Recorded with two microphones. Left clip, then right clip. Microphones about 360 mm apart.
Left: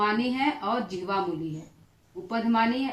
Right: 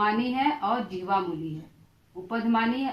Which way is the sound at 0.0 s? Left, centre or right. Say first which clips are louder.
Right 1 dB; centre.